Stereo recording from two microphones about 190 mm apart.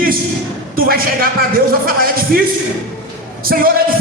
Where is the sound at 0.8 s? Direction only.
50° right (ahead or behind).